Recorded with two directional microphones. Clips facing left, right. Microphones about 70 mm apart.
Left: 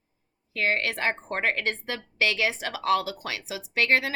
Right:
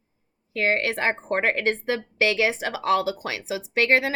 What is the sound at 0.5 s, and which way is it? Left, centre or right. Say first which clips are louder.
A woman's voice: right 3 dB; right.